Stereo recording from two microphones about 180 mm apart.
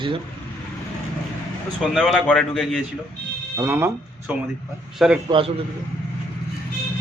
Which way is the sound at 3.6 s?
15° right (ahead or behind).